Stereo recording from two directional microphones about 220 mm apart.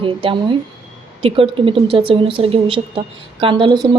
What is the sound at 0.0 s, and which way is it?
Speech, 25° right (ahead or behind).